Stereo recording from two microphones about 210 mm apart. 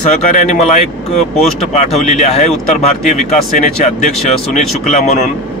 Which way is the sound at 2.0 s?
35° left (ahead or behind).